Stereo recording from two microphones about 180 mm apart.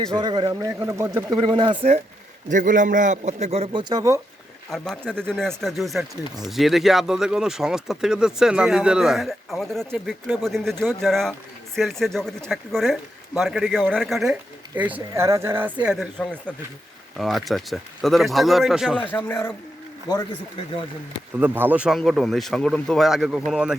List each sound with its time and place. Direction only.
0.1 s a man's voice: 25° right (ahead or behind)
1.4 s a man's voice: 30° right (ahead or behind)
2.5 s a man's voice: 45° right (ahead or behind); by 4.2 s 20° right (ahead or behind)
4.7 s speech: 5° left (ahead or behind)
19.1 s a man's voice: 10° left (ahead or behind)
21.3 s speech: 10° right (ahead or behind)